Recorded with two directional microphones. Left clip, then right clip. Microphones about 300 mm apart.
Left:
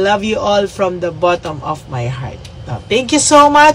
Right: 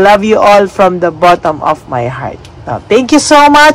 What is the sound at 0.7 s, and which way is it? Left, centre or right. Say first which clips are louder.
A man's voice: right 8 dB; right.